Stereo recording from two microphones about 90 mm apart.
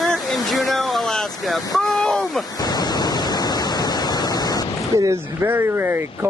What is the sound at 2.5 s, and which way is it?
Waves, 50° left (ahead or behind).